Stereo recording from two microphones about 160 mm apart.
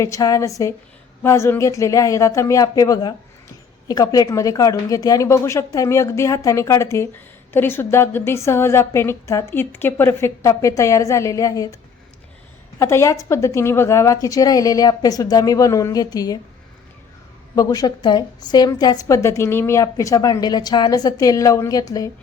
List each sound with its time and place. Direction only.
0.0 s a woman's voice: 20° left (ahead or behind)
12.8 s a woman's voice: 15° left (ahead or behind)
17.5 s a woman's voice: 20° left (ahead or behind)